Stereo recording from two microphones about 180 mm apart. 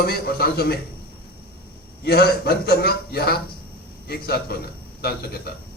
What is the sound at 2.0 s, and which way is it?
A man's voice, 60° left (ahead or behind).